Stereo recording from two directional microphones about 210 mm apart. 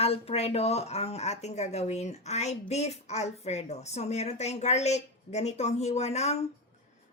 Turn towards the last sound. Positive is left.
turn(degrees=30)  # may be behind; listen again after turning